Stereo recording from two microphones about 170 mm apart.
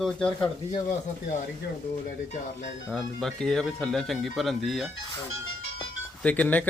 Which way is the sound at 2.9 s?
5° left (ahead or behind).